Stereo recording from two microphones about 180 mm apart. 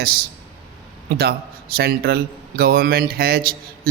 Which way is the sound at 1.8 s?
60° right (ahead or behind).